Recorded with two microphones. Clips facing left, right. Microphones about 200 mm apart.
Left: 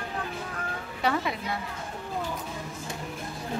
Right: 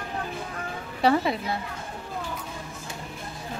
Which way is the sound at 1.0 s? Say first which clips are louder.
Right 6 dB; 30° right (ahead or behind).